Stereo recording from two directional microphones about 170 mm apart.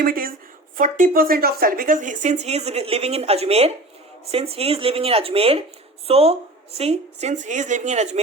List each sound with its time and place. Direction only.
0.0 s a woman's voice: 60° right (ahead or behind); by 8.2 s 40° right (ahead or behind)